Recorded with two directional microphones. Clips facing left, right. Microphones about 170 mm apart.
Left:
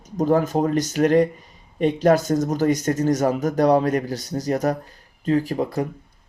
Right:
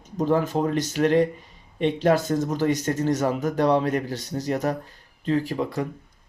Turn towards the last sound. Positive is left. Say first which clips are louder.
# left 3 dB
turn(degrees=40)  # may be behind; listen again after turning